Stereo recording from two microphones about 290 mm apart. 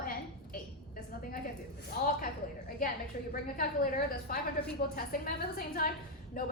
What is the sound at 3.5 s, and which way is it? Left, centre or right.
A woman's voice, left.